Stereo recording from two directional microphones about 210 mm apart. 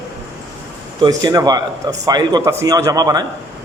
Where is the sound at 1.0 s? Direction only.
15° right (ahead or behind).